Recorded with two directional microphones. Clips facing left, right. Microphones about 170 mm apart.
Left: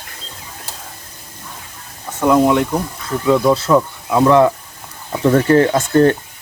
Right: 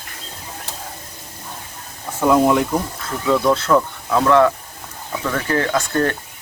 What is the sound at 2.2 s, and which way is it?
Speech, centre (ahead or behind).